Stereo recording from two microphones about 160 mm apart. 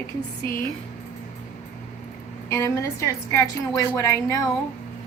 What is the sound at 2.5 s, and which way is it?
A woman's voice, 20° left (ahead or behind).